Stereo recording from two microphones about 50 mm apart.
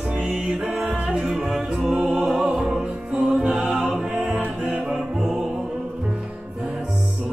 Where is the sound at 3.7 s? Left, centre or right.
Centre.